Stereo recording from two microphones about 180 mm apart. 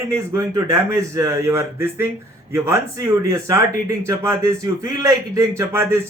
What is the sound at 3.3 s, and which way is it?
A man's voice, 15° right (ahead or behind).